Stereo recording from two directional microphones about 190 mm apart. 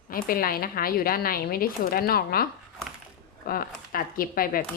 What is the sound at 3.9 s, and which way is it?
Speech, 50° left (ahead or behind).